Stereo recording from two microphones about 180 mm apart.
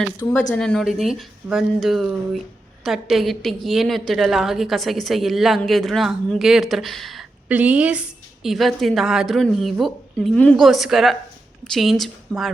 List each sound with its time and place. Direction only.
0.0 s a woman's voice: 10° left (ahead or behind)